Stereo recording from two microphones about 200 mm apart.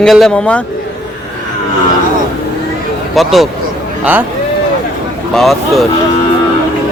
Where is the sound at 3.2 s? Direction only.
Centre (ahead or behind).